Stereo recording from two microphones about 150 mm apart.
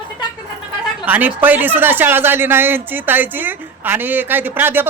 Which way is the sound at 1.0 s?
10° right (ahead or behind).